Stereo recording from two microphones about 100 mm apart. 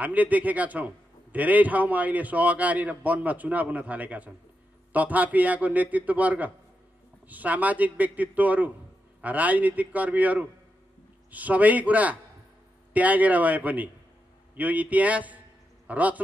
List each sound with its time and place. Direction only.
0.0 s a man's voice: 15° right (ahead or behind)